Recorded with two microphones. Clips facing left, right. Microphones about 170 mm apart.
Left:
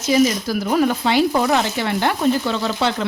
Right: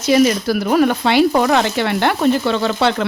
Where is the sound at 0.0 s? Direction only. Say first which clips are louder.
Right 3 dB; 70° right (ahead or behind).